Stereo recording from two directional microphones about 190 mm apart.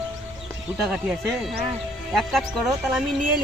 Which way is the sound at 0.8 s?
5° right (ahead or behind).